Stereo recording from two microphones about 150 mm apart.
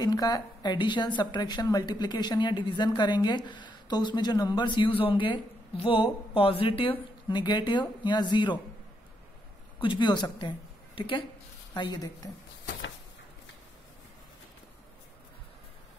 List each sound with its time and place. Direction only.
0.0 s speech: 25° left (ahead or behind)
9.8 s speech: 30° left (ahead or behind)